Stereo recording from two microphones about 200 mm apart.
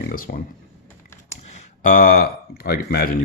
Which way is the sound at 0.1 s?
45° left (ahead or behind).